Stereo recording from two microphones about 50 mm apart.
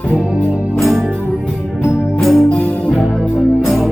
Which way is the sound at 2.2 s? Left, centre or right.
Centre.